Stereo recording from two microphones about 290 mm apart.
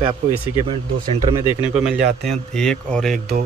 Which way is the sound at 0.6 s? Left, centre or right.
Centre.